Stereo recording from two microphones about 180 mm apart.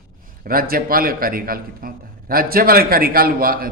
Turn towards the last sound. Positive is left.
turn(degrees=-55)  # may be behind; listen again after turning